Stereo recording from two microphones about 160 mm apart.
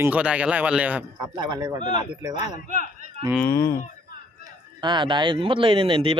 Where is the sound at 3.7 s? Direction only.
50° left (ahead or behind).